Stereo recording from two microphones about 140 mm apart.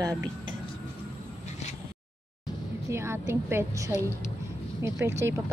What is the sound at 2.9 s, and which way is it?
A woman's voice, 20° right (ahead or behind).